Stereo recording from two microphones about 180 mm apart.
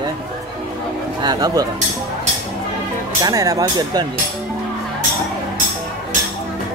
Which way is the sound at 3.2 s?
20° right (ahead or behind).